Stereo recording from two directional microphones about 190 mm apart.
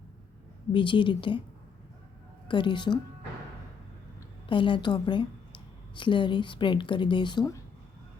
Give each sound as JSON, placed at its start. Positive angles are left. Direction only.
{"t": 0.7, "sound": "speech", "side_deg": 25}
{"t": 2.5, "sound": "speech", "side_deg": 25}
{"t": 4.4, "sound": "speech", "side_deg": 25}